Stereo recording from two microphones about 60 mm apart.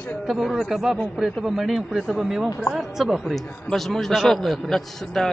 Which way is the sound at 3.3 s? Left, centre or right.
Centre.